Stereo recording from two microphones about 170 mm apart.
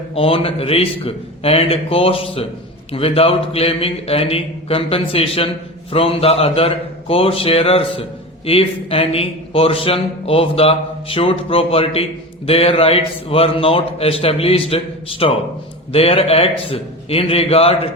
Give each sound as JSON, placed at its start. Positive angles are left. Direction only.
{"t": 0.1, "sound": "a man's voice", "side_deg": 35}